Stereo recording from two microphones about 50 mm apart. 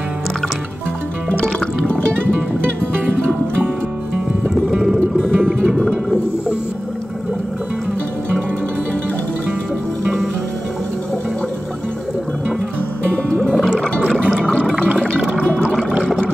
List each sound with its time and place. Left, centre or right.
4.6 s music: centre
5.2 s music: centre
13.3 s music: centre
14.4 s a sound: centre
15.0 s water: centre